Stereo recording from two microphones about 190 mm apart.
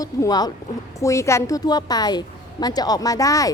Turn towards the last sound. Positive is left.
turn(degrees=15)  # may be behind; listen again after turning